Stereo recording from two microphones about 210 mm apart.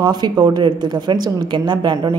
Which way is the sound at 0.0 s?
20° right (ahead or behind).